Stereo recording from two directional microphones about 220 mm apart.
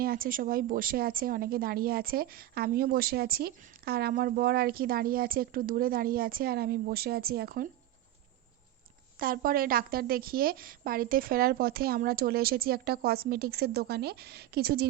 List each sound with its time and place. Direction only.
0.0 s a woman's voice: 40° right (ahead or behind)
9.1 s a woman's voice: 40° right (ahead or behind)